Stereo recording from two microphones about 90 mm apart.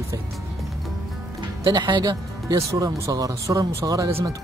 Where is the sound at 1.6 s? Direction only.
55° right (ahead or behind).